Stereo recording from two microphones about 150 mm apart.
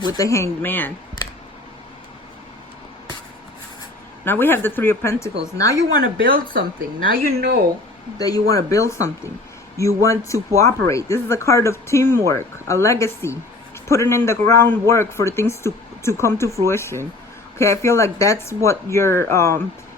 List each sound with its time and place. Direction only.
0.0 s speech: 25° left (ahead or behind)
4.3 s speech: 15° left (ahead or behind)
6.0 s speech: 75° right (ahead or behind)
8.2 s speech: 25° left (ahead or behind)